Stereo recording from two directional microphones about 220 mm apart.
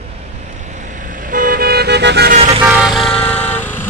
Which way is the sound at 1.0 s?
35° right (ahead or behind).